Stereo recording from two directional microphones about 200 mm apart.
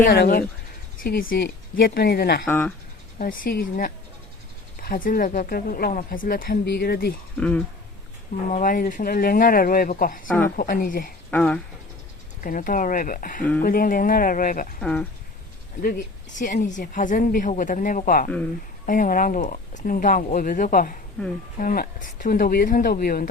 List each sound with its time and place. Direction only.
0.0 s speech: 50° left (ahead or behind)
2.5 s speech: 10° left (ahead or behind)
3.2 s speech: 45° left (ahead or behind)
7.3 s a woman's voice: 5° left (ahead or behind)
8.4 s speech: 40° left (ahead or behind)
10.2 s a woman's voice: 5° left (ahead or behind)
10.6 s speech: 45° left (ahead or behind)
11.3 s speech: 5° left (ahead or behind)
12.4 s speech: 45° left (ahead or behind)
14.8 s a woman's voice: 5° left (ahead or behind)
16.4 s a woman's voice: 40° left (ahead or behind)
21.2 s speech: 10° left (ahead or behind)
21.6 s speech: 45° left (ahead or behind)